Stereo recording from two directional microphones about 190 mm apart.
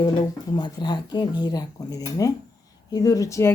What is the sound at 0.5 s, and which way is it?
Speech, 25° left (ahead or behind).